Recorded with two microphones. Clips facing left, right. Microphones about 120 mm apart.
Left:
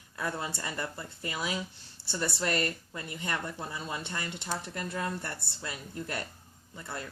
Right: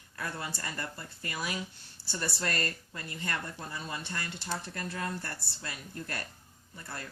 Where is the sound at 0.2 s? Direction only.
20° left (ahead or behind).